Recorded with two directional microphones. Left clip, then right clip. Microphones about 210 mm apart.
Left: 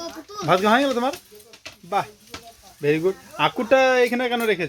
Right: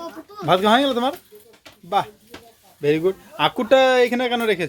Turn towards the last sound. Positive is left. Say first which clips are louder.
# right 1 dB
turn(degrees=-5)  # may be behind; listen again after turning